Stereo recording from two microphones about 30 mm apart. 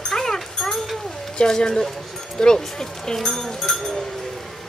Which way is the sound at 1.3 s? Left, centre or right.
Left.